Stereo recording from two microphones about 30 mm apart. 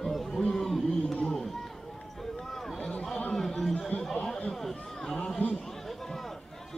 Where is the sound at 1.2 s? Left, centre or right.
Left.